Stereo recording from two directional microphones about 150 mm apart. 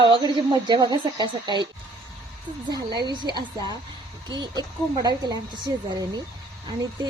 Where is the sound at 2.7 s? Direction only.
30° right (ahead or behind).